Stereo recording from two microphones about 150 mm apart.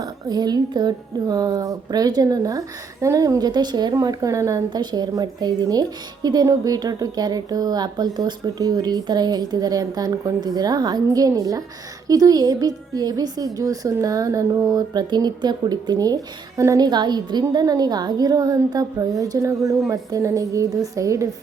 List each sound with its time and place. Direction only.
0.0 s a woman's voice: 25° right (ahead or behind)